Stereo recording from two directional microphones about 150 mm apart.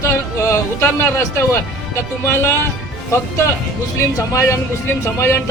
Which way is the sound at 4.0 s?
20° left (ahead or behind).